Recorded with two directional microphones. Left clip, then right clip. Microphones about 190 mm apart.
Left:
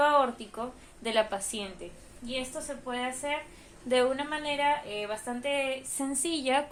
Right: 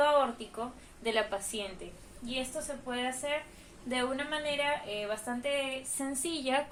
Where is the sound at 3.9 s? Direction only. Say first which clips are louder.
Left 6 dB; 35° left (ahead or behind).